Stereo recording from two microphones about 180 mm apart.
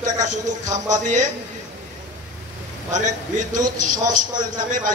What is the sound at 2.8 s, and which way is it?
A man's voice, 45° right (ahead or behind).